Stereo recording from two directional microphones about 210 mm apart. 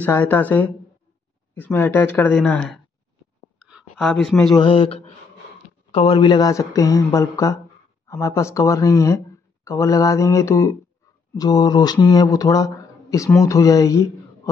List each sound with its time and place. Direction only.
0.0 s speech: 10° left (ahead or behind)
3.5 s whispering: 5° right (ahead or behind)
3.9 s speech: centre (ahead or behind)
4.6 s speech: 25° left (ahead or behind)